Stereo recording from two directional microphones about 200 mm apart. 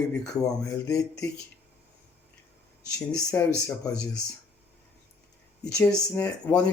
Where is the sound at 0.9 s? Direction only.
15° left (ahead or behind).